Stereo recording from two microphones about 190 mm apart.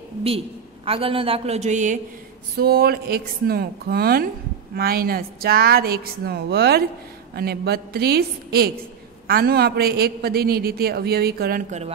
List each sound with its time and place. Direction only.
0.8 s a woman's voice: 30° right (ahead or behind)
2.5 s a woman's voice: 55° right (ahead or behind)